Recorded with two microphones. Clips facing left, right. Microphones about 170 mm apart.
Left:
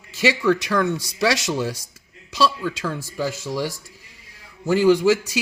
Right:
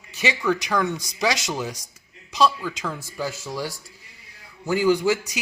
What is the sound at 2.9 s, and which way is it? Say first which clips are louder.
Speech: left 4 dB; 90° left.